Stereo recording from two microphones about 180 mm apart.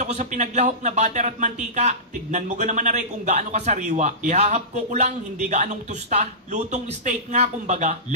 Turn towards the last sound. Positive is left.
turn(degrees=-40)  # may be behind; listen again after turning